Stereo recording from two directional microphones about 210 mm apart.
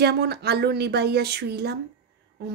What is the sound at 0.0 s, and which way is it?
A woman's voice, 50° right (ahead or behind).